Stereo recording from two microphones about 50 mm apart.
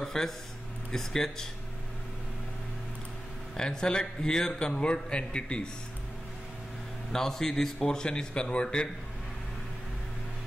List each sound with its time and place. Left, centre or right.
0.0 s a sound: centre
0.9 s a man's voice: centre
3.5 s a man's voice: centre
7.1 s a man's voice: centre